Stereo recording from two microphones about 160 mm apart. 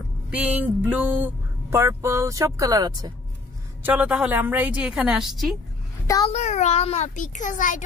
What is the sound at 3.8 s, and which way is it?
A woman's voice, 5° right (ahead or behind).